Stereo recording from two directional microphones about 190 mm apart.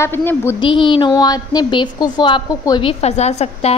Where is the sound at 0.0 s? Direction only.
10° left (ahead or behind).